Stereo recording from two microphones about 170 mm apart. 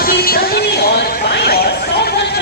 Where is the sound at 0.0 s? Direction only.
60° left (ahead or behind).